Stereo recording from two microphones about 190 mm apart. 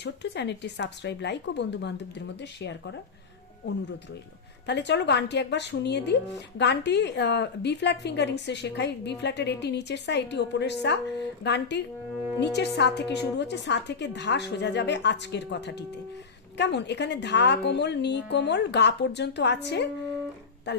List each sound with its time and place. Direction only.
0.0 s a woman's voice: 65° left (ahead or behind)
4.6 s a woman's voice: 65° left (ahead or behind)